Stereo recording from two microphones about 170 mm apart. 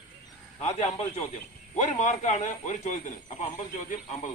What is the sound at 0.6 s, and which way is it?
Speech, 40° left (ahead or behind).